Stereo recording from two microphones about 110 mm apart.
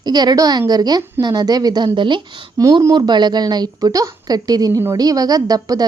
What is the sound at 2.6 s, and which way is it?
A woman's voice, 35° right (ahead or behind).